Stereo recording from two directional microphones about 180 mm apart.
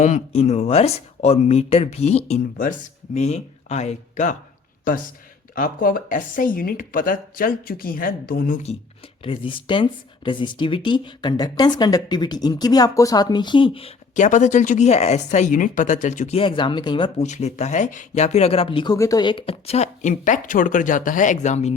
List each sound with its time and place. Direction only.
0.0 s speech: 40° left (ahead or behind)
5.5 s speech: 50° left (ahead or behind)
9.2 s speech: 30° left (ahead or behind)
14.3 s speech: 45° left (ahead or behind); by 17.2 s 25° left (ahead or behind)
17.2 s speech: 40° left (ahead or behind)